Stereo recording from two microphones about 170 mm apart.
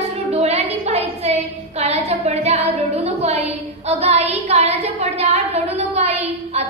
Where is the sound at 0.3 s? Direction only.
40° right (ahead or behind).